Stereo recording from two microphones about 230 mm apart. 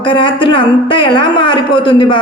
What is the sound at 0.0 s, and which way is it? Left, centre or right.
A man's voice, left.